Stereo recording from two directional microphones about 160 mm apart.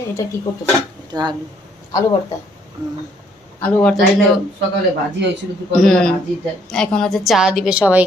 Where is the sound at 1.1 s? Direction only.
25° right (ahead or behind).